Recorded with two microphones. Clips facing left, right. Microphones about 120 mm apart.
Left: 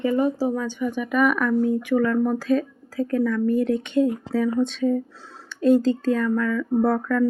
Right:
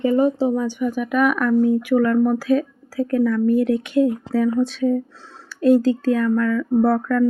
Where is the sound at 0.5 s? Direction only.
10° right (ahead or behind).